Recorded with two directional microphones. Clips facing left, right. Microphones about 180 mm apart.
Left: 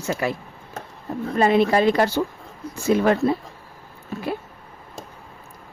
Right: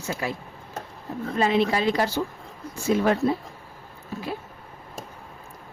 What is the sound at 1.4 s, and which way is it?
Speech, 55° left (ahead or behind).